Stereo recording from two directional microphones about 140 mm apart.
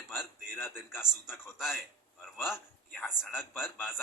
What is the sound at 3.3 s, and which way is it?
Speech, 15° left (ahead or behind).